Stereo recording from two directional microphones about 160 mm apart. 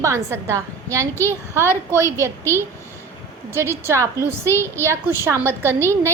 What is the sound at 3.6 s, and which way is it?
A woman's voice, 15° right (ahead or behind).